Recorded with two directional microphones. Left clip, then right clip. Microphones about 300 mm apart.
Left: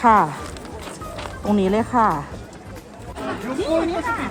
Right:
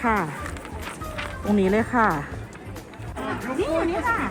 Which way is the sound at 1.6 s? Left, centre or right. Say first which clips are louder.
Left 3 dB; left.